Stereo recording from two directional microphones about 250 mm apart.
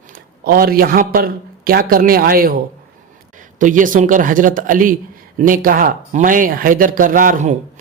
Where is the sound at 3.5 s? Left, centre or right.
Right.